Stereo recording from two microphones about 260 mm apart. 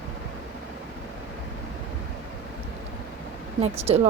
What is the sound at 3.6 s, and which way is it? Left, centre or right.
Speech, right.